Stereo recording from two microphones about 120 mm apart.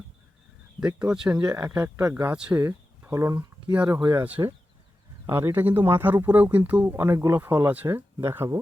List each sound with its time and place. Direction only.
0.8 s speech: 10° right (ahead or behind); by 3.4 s 25° right (ahead or behind)
3.7 s speech: 15° right (ahead or behind)